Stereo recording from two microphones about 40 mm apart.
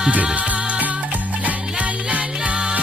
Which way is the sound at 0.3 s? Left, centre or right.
Right.